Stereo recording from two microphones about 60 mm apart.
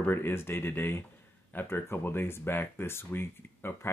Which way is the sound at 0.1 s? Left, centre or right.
Left.